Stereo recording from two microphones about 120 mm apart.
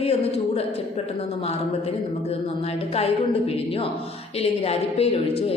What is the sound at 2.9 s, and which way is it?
Speech, 55° left (ahead or behind).